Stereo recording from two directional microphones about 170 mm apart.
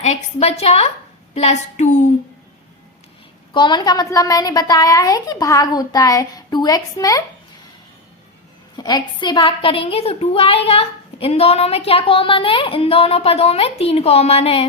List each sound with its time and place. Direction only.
0.0 s a woman's voice: 40° left (ahead or behind)
3.5 s a woman's voice: 25° left (ahead or behind)
8.7 s a woman's voice: 25° left (ahead or behind)